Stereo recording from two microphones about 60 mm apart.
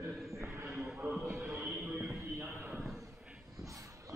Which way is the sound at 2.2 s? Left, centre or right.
Right.